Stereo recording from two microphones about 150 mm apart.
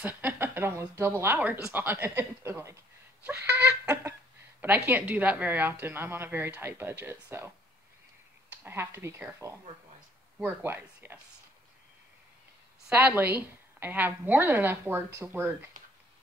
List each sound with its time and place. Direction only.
0.0 s a woman's voice: 15° right (ahead or behind)
3.4 s a sound: 10° right (ahead or behind)
4.6 s a woman's voice: 10° right (ahead or behind)
12.9 s a woman's voice: 10° right (ahead or behind)